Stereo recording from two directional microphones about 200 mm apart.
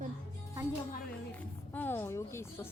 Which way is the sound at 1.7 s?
10° left (ahead or behind).